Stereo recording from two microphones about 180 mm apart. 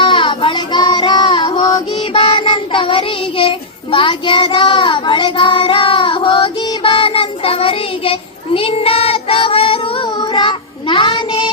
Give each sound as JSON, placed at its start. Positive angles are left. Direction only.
{"t": 0.0, "sound": "child singing", "side_deg": 25}